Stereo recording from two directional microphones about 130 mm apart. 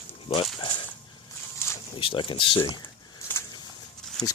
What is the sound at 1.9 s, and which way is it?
Speech, 40° left (ahead or behind).